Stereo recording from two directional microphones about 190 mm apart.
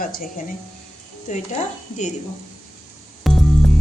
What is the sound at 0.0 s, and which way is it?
Speech, 45° left (ahead or behind).